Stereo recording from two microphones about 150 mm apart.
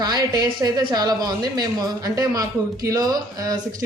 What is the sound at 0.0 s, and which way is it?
A woman's voice, 25° right (ahead or behind).